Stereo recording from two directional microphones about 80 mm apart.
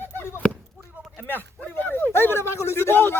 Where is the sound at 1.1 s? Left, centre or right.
Left.